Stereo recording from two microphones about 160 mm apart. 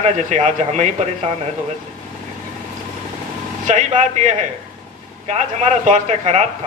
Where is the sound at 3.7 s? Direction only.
45° right (ahead or behind).